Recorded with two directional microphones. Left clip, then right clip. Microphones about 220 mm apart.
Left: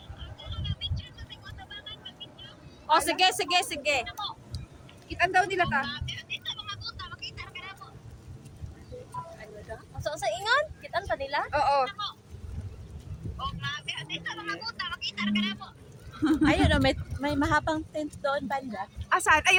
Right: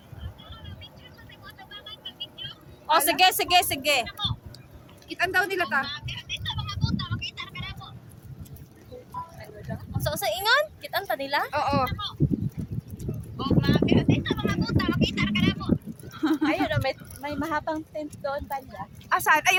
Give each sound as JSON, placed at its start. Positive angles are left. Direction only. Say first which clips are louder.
{"t": 2.8, "sound": "speech", "louder": "right 3 dB", "side_deg": -35}
{"t": 4.0, "sound": "speech", "louder": "right 4 dB", "side_deg": -20}
{"t": 5.0, "sound": "a sound", "louder": "even", "side_deg": -25}
{"t": 10.0, "sound": "a sound", "louder": "right 3 dB", "side_deg": -40}
{"t": 11.5, "sound": "speech", "louder": "even", "side_deg": -15}
{"t": 13.4, "sound": "vehicle", "louder": "right 9 dB", "side_deg": -20}
{"t": 16.2, "sound": "a sound", "louder": "even", "side_deg": -20}
{"t": 16.5, "sound": "speech", "louder": "left 2 dB", "side_deg": 20}
{"t": 19.0, "sound": "speech", "louder": "right 1 dB", "side_deg": -20}